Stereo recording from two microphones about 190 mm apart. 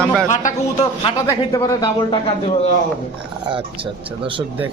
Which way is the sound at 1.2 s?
20° left (ahead or behind).